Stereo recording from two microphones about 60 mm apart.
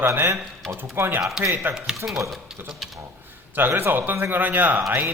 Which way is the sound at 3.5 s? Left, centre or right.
Right.